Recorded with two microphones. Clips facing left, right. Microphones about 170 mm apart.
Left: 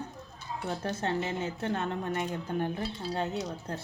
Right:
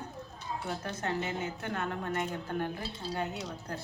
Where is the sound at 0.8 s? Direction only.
25° left (ahead or behind).